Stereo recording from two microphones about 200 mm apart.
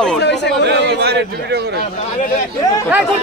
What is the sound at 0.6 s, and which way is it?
A man's voice, 55° right (ahead or behind).